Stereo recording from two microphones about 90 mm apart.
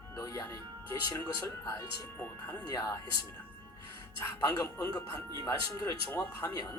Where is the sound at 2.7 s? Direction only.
40° left (ahead or behind).